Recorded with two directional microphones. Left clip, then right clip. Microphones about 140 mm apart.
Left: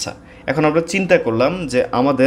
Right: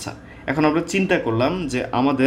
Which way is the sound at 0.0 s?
40° left (ahead or behind).